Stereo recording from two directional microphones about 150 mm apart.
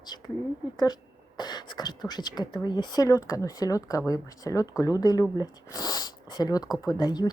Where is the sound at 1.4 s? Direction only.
30° left (ahead or behind).